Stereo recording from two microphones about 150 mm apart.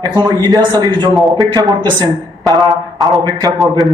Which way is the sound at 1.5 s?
25° right (ahead or behind).